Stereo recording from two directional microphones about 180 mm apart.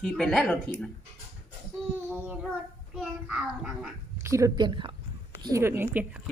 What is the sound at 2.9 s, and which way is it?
Child singing, 5° right (ahead or behind).